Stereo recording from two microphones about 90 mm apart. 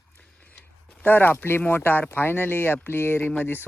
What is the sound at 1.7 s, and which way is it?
Speech, 25° left (ahead or behind).